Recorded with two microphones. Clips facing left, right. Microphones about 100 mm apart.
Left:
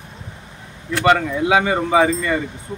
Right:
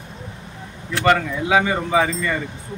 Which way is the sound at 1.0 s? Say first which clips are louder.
Left 2 dB; 25° left (ahead or behind).